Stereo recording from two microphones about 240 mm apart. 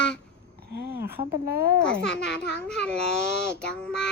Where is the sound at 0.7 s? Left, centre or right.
Right.